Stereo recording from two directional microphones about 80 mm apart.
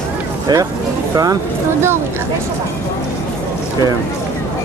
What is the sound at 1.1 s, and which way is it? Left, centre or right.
Speech, right.